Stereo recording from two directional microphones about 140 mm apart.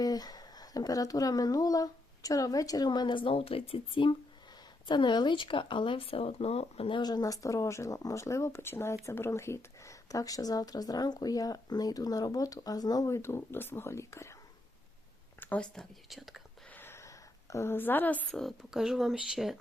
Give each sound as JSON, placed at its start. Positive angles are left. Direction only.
{"t": 0.0, "sound": "speech", "side_deg": 30}
{"t": 15.4, "sound": "speech", "side_deg": 10}
{"t": 16.6, "sound": "speech", "side_deg": 15}